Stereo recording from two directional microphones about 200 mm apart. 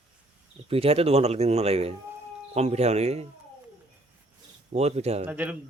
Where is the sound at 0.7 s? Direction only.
30° right (ahead or behind).